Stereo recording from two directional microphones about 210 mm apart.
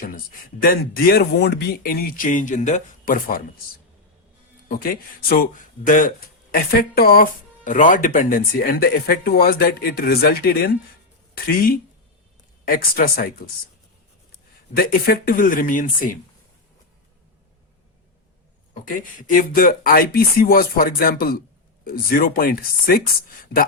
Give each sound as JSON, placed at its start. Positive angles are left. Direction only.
{"t": 0.0, "sound": "speech", "side_deg": 40}
{"t": 5.3, "sound": "speech", "side_deg": 40}
{"t": 14.8, "sound": "speech", "side_deg": 45}
{"t": 18.7, "sound": "speech", "side_deg": 40}